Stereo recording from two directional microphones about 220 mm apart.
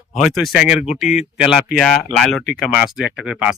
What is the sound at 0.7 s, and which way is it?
Speech, 30° left (ahead or behind).